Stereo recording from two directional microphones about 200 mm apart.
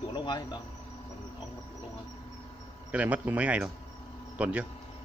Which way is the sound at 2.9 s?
5° right (ahead or behind).